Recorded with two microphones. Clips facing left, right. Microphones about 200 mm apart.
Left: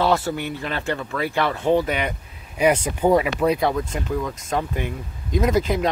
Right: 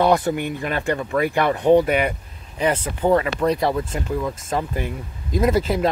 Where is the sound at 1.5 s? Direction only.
15° right (ahead or behind).